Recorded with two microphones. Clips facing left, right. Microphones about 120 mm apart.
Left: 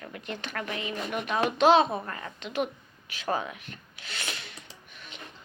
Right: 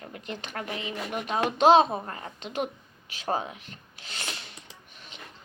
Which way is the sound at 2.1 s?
30° right (ahead or behind).